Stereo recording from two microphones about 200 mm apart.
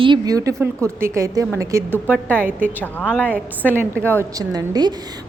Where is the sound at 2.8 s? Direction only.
5° left (ahead or behind).